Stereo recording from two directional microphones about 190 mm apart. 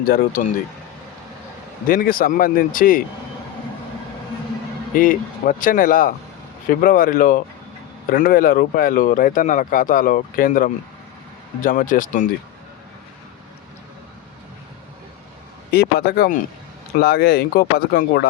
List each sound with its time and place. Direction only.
0.0 s speech: 50° left (ahead or behind)
1.9 s speech: 50° left (ahead or behind)
4.9 s speech: 45° left (ahead or behind)
15.7 s speech: 55° left (ahead or behind)